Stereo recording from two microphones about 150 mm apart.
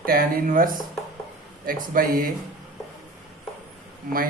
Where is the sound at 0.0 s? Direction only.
70° right (ahead or behind).